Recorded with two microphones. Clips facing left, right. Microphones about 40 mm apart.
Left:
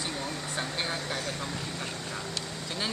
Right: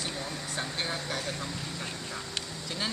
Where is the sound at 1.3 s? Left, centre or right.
Centre.